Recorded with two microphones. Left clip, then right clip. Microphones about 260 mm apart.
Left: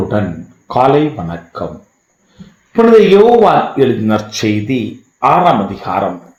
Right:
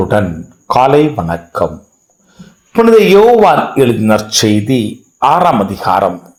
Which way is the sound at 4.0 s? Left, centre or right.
Right.